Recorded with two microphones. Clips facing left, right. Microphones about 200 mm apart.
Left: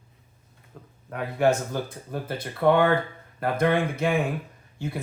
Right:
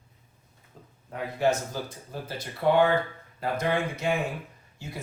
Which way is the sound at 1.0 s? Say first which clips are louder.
Left 3 dB; 60° left (ahead or behind).